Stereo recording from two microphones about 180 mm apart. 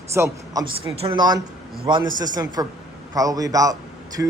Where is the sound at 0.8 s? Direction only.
25° right (ahead or behind).